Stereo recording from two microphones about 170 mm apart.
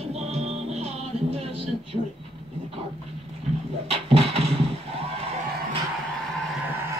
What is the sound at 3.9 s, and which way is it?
Music, 35° right (ahead or behind).